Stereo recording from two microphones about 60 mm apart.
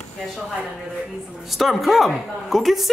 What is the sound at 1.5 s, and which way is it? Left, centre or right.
A woman's voice, centre.